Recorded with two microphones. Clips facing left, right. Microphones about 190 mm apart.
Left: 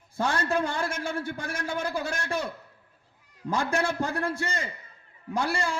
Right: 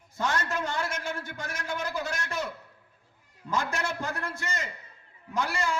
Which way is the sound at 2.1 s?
30° left (ahead or behind).